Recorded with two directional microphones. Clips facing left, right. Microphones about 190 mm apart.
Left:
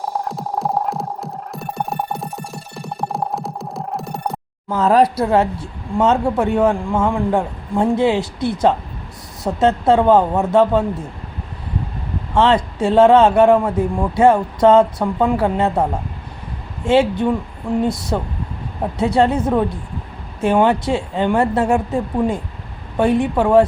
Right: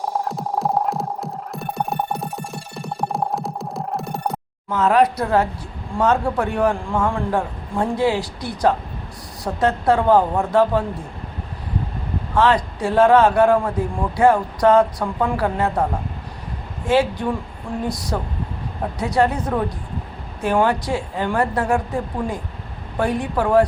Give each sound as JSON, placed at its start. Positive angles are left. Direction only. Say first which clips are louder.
{"t": 0.3, "sound": "music", "louder": "even", "side_deg": 0}
{"t": 4.7, "sound": "speech", "louder": "left 2 dB", "side_deg": 35}
{"t": 12.3, "sound": "speech", "louder": "left 2 dB", "side_deg": 25}
{"t": 16.8, "sound": "speech", "louder": "left 4 dB", "side_deg": 25}